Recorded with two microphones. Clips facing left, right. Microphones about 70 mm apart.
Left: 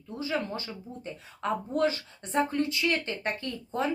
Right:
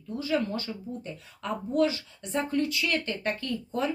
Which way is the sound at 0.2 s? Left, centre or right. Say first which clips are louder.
Right 3 dB; left.